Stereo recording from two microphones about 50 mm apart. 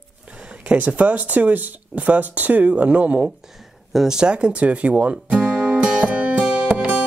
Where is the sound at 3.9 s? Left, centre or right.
Centre.